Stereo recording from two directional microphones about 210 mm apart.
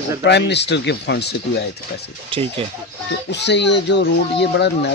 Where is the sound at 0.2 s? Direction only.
55° left (ahead or behind).